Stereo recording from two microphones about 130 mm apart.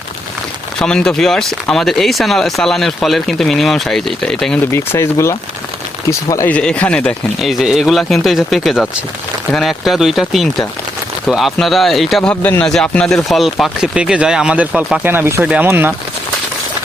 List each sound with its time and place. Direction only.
0.8 s speech: 5° left (ahead or behind)
4.9 s speech: 20° left (ahead or behind)
6.5 s speech: 10° left (ahead or behind)
7.3 s speech: centre (ahead or behind)
12.3 s speech: 10° left (ahead or behind); by 15.0 s 5° right (ahead or behind)
15.0 s speech: 15° right (ahead or behind)